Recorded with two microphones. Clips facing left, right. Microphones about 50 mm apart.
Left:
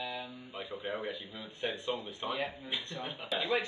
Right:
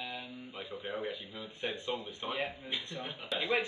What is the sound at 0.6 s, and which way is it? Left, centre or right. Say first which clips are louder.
Speech: left 1 dB; centre.